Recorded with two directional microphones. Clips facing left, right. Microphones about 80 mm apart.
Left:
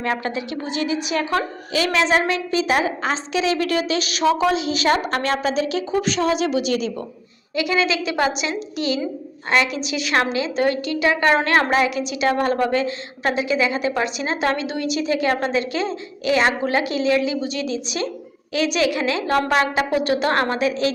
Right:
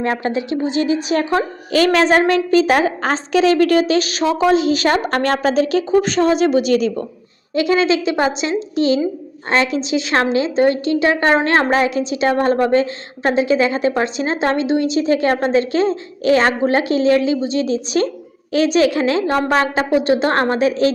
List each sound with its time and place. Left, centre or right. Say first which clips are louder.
0.0 s a woman's voice: right 4 dB; right
1.7 s a woman's voice: right 6 dB; right